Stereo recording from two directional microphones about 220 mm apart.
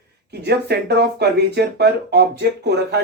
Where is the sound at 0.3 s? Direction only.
50° right (ahead or behind).